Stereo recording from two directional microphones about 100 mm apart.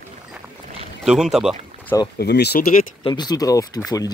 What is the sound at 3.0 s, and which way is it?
Speech, 50° left (ahead or behind).